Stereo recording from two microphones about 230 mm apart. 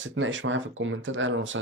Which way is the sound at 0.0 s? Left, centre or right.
Right.